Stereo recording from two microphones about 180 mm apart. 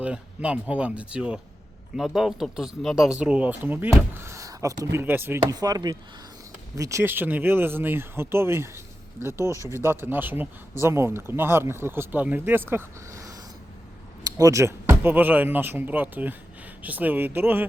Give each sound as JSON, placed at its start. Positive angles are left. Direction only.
{"t": 0.0, "sound": "speech", "side_deg": -5}